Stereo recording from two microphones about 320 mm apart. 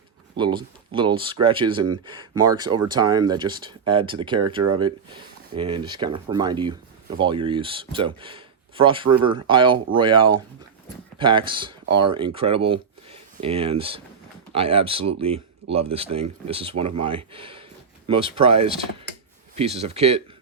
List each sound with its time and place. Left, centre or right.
0.3 s speech: centre
5.5 s speech: centre